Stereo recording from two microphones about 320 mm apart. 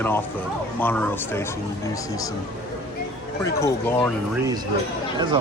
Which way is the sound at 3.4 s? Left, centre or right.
Centre.